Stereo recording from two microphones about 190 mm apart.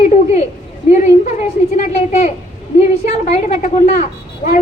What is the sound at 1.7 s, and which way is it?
A woman's voice, 40° left (ahead or behind).